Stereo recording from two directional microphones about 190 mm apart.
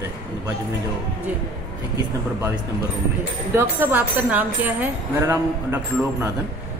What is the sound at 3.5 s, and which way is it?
Speech, 10° right (ahead or behind).